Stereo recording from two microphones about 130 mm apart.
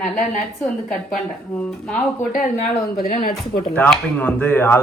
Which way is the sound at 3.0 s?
65° left (ahead or behind).